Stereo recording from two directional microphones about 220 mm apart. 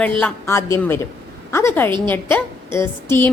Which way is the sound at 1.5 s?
10° left (ahead or behind).